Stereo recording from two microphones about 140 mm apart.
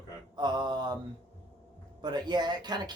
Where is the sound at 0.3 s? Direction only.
30° right (ahead or behind).